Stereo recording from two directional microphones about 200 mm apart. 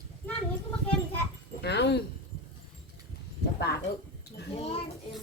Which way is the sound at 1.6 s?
55° left (ahead or behind).